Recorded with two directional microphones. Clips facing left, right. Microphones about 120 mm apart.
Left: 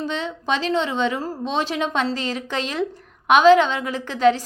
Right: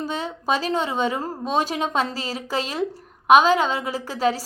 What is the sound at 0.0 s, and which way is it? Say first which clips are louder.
Speech: left 1 dB; 40° right (ahead or behind).